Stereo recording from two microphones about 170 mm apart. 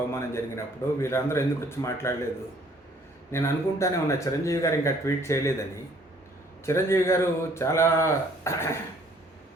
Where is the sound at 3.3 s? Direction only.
15° left (ahead or behind).